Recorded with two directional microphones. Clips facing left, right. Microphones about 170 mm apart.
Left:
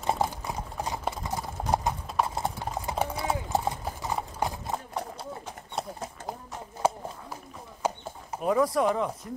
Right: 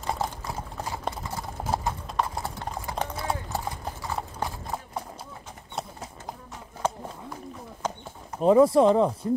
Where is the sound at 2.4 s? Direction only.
20° left (ahead or behind).